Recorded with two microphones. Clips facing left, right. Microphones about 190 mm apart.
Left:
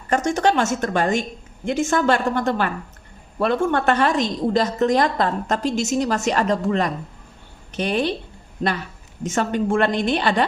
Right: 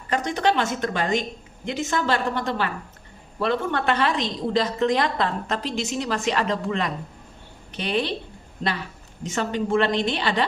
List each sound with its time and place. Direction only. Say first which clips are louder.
0.1 s a woman's voice: left 4 dB; 45° left (ahead or behind)
9.2 s a woman's voice: left 4 dB; 50° left (ahead or behind)